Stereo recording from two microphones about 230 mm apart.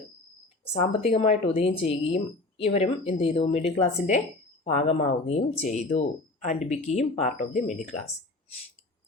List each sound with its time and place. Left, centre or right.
0.8 s speech: left